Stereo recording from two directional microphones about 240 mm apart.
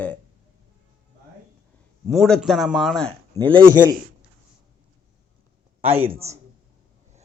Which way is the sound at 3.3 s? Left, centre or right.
Right.